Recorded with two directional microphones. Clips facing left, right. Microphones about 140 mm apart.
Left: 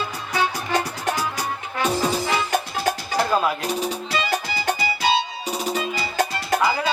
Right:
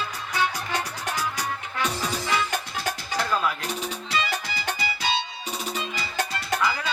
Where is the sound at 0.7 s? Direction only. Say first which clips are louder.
Left 6 dB; 40° left (ahead or behind).